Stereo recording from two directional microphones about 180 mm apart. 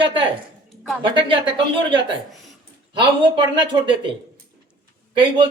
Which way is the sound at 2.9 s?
25° right (ahead or behind).